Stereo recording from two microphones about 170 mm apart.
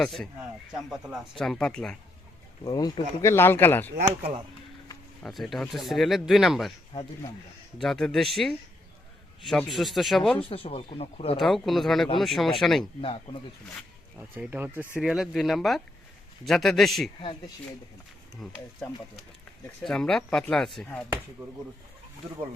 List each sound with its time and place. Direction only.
0.0 s speech: 5° left (ahead or behind)
2.6 s speech: 25° left (ahead or behind)
3.9 s speech: 60° right (ahead or behind)
5.2 s speech: centre (ahead or behind)
7.8 s speech: 5° left (ahead or behind)
10.4 s speech: 35° left (ahead or behind)
11.3 s speech: centre (ahead or behind)
13.0 s speech: 30° left (ahead or behind)
14.2 s speech: 10° right (ahead or behind)
18.3 s speech: centre (ahead or behind)